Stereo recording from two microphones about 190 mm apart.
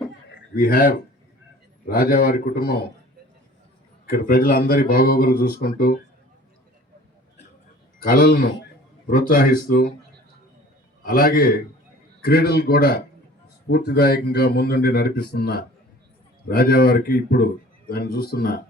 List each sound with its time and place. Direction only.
0.3 s a sound: 50° left (ahead or behind)
1.9 s a man's voice: 50° left (ahead or behind)
4.0 s a man's voice: 50° left (ahead or behind)
8.0 s a man's voice: 55° left (ahead or behind)
11.0 s a man's voice: 50° left (ahead or behind)